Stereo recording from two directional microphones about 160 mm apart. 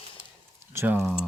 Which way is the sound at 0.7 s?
15° right (ahead or behind).